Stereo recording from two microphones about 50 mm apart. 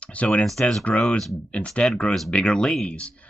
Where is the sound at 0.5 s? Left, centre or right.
Centre.